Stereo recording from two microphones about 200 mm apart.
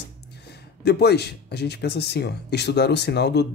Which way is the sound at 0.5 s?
55° left (ahead or behind).